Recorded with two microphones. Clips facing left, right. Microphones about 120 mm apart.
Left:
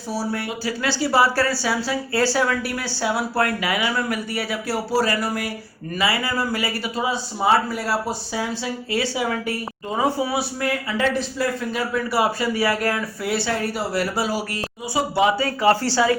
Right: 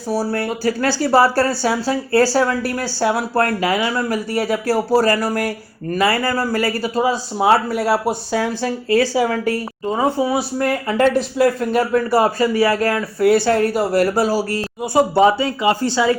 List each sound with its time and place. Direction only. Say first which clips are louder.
0.1 s speech: right 6 dB; 45° right (ahead or behind)
7.3 s speech: right 3 dB; 60° right (ahead or behind); by 15.4 s 40° right (ahead or behind)
15.4 s speech: right 1 dB; 20° right (ahead or behind)